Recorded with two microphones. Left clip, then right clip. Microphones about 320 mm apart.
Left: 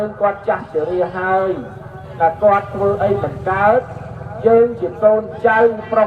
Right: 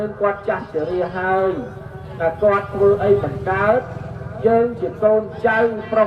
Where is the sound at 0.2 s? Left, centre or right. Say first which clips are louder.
Left 3 dB; centre.